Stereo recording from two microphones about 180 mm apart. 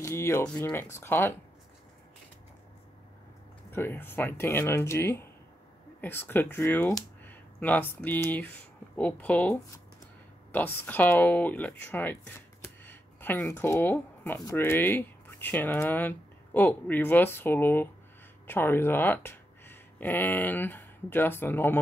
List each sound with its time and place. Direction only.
0.0 s speech: 15° left (ahead or behind)
3.7 s speech: 10° left (ahead or behind)